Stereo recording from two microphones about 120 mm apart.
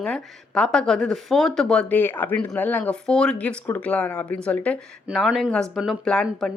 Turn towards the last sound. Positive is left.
turn(degrees=5)  # may be behind; listen again after turning